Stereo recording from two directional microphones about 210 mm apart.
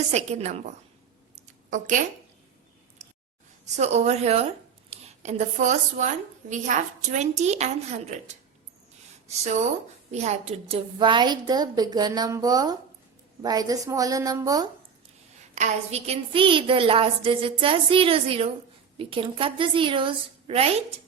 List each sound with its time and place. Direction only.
0.1 s a woman's voice: 30° right (ahead or behind)
1.4 s a sound: 35° right (ahead or behind)
3.8 s a woman's voice: 30° right (ahead or behind)
15.5 s a woman's voice: 30° right (ahead or behind)